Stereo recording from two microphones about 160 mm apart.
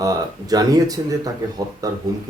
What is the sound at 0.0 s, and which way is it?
Speech, 25° right (ahead or behind).